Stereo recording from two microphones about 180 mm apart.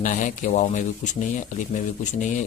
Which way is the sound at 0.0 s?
45° left (ahead or behind).